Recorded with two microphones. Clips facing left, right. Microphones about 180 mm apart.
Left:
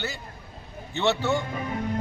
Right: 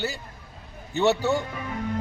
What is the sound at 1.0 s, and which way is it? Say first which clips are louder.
Speech: right 2 dB; 35° right (ahead or behind).